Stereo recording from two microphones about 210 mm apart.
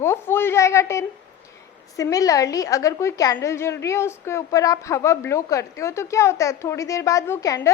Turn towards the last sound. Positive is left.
turn(degrees=15)  # may be behind; listen again after turning